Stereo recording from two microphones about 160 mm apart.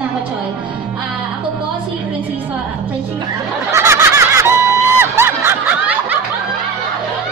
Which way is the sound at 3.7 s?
15° right (ahead or behind).